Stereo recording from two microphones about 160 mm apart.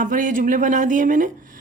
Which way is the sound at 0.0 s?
55° right (ahead or behind).